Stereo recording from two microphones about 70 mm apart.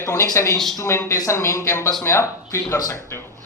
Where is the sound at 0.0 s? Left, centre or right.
Left.